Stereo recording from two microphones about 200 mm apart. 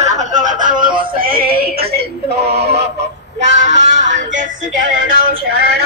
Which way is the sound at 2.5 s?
30° right (ahead or behind).